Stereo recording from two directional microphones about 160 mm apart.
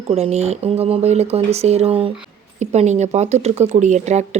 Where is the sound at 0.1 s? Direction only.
40° right (ahead or behind).